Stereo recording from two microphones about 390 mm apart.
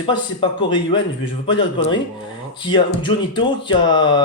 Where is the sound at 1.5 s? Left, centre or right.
Left.